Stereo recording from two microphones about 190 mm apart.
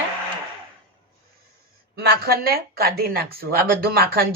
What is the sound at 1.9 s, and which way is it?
Speech, 55° right (ahead or behind).